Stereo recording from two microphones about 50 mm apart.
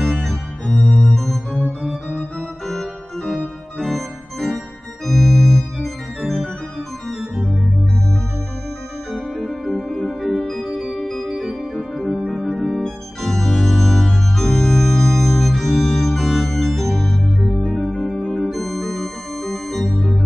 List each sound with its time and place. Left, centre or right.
0.0 s organ: centre
0.7 s organ: left
1.0 s music: centre
2.7 s organ: centre
9.1 s music: centre
10.9 s organ: centre
11.3 s organ: centre
12.3 s music: centre
13.6 s organ: centre
17.6 s music: centre
18.2 s organ: centre